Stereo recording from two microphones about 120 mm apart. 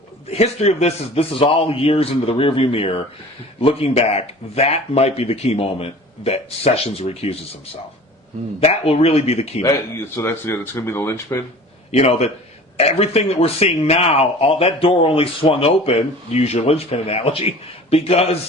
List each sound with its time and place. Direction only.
0.3 s a man's voice: 65° left (ahead or behind)
8.6 s a man's voice: 55° left (ahead or behind)
10.2 s speech: 20° left (ahead or behind)
11.9 s a man's voice: 60° left (ahead or behind)